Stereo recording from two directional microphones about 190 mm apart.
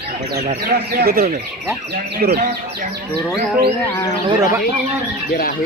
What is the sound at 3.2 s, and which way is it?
Speech, centre (ahead or behind).